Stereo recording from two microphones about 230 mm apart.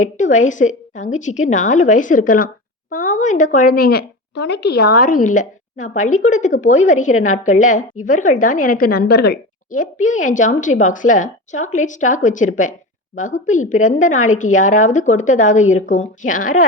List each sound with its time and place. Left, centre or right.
0.0 s a woman's voice: left